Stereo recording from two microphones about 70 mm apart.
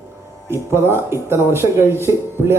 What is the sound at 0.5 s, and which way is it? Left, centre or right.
Speech, right.